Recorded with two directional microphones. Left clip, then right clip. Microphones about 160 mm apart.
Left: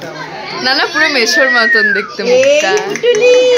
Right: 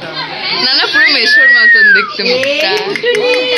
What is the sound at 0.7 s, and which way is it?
Speech, 15° left (ahead or behind).